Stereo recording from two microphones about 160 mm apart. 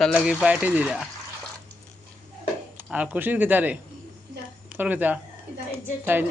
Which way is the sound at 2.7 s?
10° right (ahead or behind).